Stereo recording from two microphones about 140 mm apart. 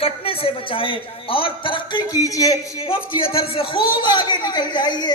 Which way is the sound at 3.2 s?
40° left (ahead or behind).